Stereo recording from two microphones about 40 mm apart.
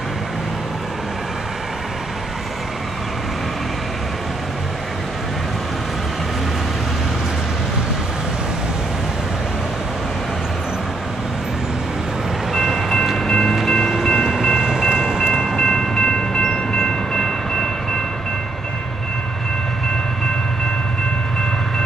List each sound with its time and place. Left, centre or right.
12.5 s music: centre
13.2 s train: centre
14.3 s train: centre
15.5 s train: centre